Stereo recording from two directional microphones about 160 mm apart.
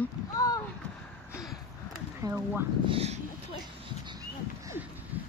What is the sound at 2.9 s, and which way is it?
Speech, 40° right (ahead or behind).